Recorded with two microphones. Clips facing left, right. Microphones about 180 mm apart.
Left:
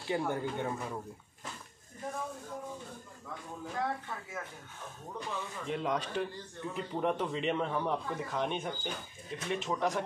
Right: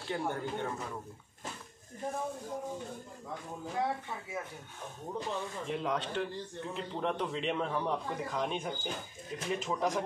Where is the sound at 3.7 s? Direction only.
10° right (ahead or behind).